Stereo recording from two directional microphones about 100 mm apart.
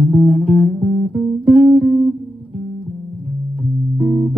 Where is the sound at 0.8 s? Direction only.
15° left (ahead or behind).